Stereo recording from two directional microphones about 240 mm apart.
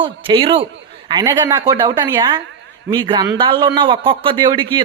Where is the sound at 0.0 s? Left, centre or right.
Right.